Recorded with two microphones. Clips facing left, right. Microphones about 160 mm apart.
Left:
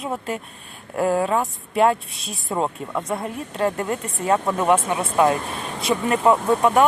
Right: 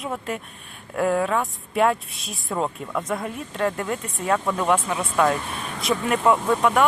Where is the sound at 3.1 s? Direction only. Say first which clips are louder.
Left 1 dB; 30° left (ahead or behind).